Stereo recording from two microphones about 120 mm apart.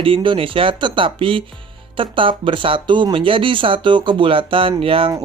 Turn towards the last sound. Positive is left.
turn(degrees=-50)  # may be behind; listen again after turning